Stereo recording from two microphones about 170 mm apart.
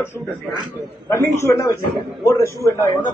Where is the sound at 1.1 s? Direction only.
15° left (ahead or behind).